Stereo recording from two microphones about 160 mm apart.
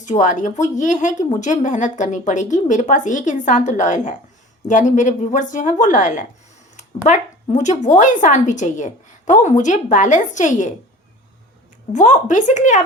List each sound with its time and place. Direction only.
0.0 s a woman's voice: 50° left (ahead or behind)
6.7 s a sound: 50° left (ahead or behind)
7.5 s a woman's voice: 50° left (ahead or behind)
11.9 s a woman's voice: 50° left (ahead or behind)